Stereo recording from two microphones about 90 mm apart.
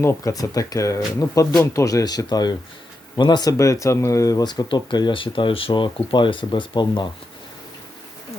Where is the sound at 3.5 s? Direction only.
35° left (ahead or behind); by 7.1 s 55° left (ahead or behind).